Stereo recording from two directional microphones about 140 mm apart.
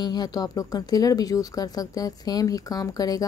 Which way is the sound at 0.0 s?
30° left (ahead or behind).